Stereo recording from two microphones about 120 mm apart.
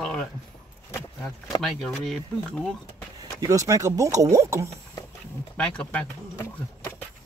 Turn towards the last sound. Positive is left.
turn(degrees=20)  # may be behind; listen again after turning